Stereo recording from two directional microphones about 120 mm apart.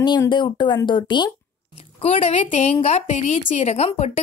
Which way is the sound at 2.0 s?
60° left (ahead or behind).